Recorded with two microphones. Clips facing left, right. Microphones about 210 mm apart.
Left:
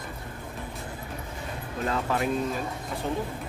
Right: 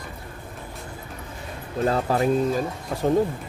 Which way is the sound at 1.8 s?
35° right (ahead or behind).